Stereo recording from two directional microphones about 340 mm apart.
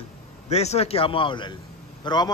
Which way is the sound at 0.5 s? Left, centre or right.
Centre.